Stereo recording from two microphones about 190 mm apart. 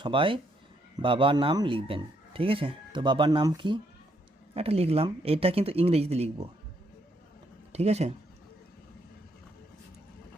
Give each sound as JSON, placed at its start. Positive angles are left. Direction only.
{"t": 0.0, "sound": "speech", "side_deg": -25}
{"t": 7.7, "sound": "speech", "side_deg": -35}